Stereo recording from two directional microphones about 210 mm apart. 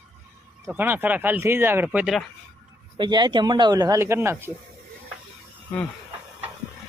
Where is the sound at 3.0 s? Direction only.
20° right (ahead or behind).